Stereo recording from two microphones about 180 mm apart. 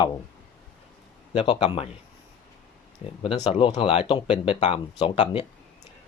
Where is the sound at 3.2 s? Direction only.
30° left (ahead or behind).